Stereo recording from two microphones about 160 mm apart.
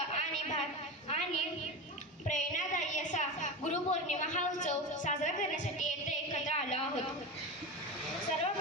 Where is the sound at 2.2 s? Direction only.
50° left (ahead or behind).